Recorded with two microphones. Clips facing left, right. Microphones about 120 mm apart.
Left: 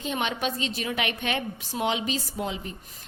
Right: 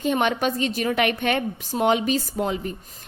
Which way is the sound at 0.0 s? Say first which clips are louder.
Right 7 dB; 50° right (ahead or behind).